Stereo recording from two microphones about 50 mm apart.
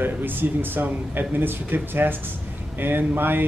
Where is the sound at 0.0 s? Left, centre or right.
Right.